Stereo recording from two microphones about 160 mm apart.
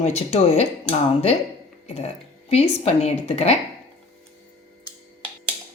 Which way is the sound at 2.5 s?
40° left (ahead or behind).